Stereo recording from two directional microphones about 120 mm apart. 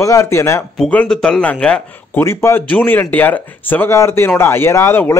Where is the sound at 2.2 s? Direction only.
20° left (ahead or behind).